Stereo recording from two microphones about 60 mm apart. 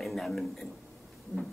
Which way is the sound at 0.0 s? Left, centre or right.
Centre.